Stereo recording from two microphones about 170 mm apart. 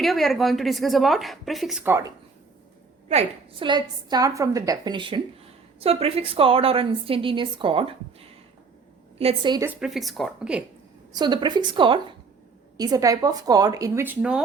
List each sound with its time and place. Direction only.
0.0 s a woman's voice: centre (ahead or behind)
1.9 s speech: 15° right (ahead or behind)
3.1 s a woman's voice: 35° right (ahead or behind)
9.6 s a woman's voice: centre (ahead or behind)
11.1 s a woman's voice: 25° right (ahead or behind); by 14.4 s 5° right (ahead or behind)